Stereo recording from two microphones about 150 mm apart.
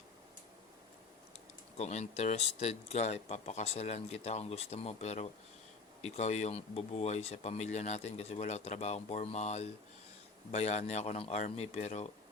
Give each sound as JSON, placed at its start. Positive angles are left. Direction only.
{"t": 1.8, "sound": "speech", "side_deg": 45}